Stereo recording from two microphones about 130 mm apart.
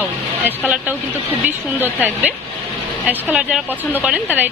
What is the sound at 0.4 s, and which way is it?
Speech, 10° right (ahead or behind).